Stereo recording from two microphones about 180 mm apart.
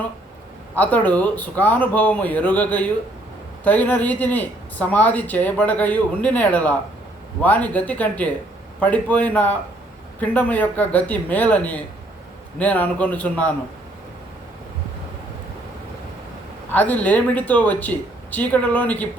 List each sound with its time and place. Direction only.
0.8 s speech: 10° left (ahead or behind)
16.7 s speech: 10° left (ahead or behind)